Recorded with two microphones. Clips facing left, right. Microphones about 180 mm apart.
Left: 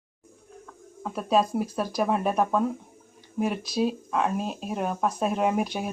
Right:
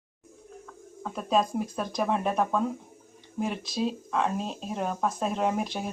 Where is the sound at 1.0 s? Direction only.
5° left (ahead or behind).